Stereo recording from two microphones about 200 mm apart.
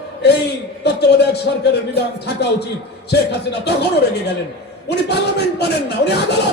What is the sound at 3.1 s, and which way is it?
A man's voice, 55° left (ahead or behind).